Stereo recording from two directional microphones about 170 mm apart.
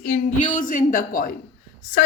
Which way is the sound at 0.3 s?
50° left (ahead or behind).